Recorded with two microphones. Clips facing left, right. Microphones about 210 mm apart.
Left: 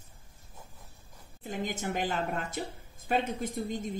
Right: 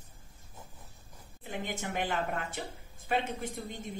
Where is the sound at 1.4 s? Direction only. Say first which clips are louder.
Left 3 dB; 40° left (ahead or behind).